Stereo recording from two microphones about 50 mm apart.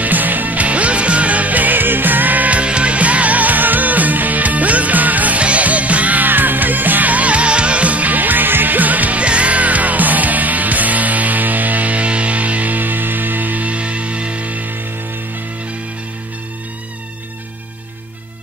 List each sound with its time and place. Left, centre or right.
0.0 s music: right